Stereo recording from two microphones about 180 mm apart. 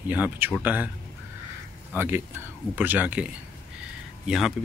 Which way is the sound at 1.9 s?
10° right (ahead or behind).